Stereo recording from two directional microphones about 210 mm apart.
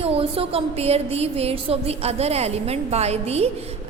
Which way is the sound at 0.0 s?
25° right (ahead or behind).